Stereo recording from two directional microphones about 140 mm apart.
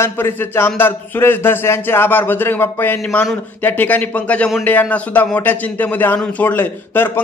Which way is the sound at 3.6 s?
10° left (ahead or behind).